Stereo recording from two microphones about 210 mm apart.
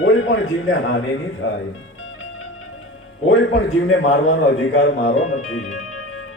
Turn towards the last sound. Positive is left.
turn(degrees=90)